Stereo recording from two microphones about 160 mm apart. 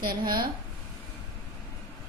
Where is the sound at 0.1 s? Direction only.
30° right (ahead or behind).